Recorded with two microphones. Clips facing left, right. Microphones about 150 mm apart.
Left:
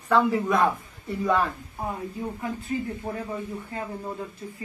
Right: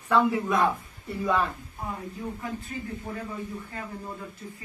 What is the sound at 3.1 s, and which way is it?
Speech, 35° left (ahead or behind).